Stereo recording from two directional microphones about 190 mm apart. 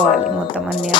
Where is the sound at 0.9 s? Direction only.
25° left (ahead or behind).